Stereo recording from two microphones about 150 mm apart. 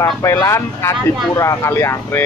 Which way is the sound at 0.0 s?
20° left (ahead or behind).